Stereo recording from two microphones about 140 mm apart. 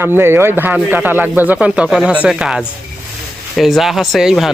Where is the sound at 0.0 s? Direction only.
15° right (ahead or behind).